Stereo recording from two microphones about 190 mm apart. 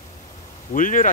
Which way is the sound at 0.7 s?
45° left (ahead or behind).